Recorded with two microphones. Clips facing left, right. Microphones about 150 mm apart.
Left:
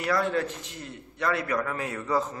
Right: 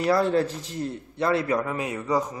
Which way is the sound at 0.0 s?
30° right (ahead or behind).